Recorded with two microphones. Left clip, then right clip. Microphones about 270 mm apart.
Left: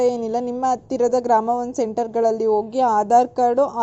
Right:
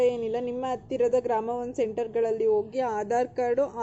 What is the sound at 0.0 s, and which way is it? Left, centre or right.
A woman's voice, centre.